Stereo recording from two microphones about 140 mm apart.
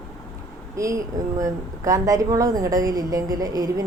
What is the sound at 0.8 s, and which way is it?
Speech, 20° right (ahead or behind).